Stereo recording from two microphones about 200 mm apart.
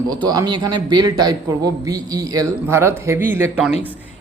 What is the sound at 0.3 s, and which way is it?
A man's voice, 20° right (ahead or behind).